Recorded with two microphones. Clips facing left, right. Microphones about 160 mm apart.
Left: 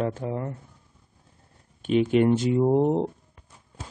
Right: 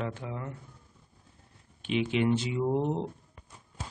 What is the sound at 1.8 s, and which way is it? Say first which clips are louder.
Speech: left 7 dB; 45° left (ahead or behind).